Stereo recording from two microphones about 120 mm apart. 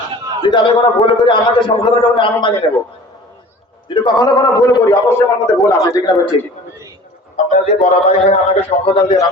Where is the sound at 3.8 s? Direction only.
40° left (ahead or behind).